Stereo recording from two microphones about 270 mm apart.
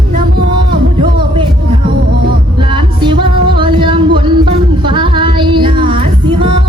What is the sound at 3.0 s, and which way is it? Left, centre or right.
Music, centre.